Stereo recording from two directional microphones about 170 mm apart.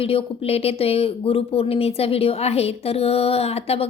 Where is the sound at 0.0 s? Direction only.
35° left (ahead or behind).